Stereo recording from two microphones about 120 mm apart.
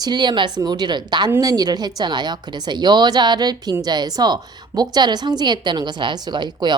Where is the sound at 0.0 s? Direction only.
40° right (ahead or behind).